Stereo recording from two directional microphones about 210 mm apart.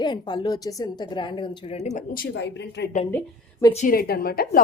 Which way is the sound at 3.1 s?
15° left (ahead or behind).